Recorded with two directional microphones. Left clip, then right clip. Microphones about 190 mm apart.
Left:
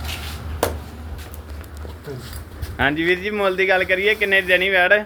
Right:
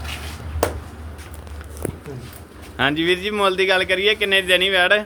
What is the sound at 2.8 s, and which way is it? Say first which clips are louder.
Speech: even; 25° right (ahead or behind).